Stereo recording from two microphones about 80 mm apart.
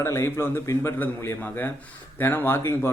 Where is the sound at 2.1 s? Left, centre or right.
Left.